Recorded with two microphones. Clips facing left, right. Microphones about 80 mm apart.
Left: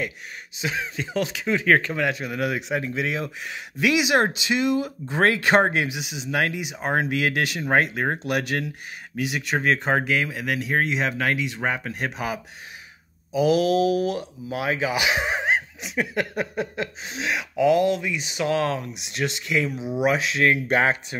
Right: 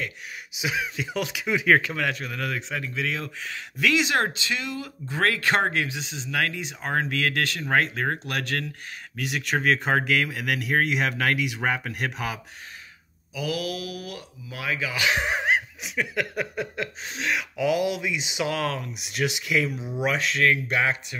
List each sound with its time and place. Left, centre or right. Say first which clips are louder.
0.6 s speech: even; centre
2.0 s speech: left 4 dB; centre
9.2 s speech: left 1 dB; centre
13.3 s speech: left 10 dB; left
15.0 s a sound: left 1 dB; centre
16.0 s speech: left 2 dB; centre
18.4 s speech: left 4 dB; centre
19.9 s speech: left 4 dB; centre
20.6 s speech: left 4 dB; left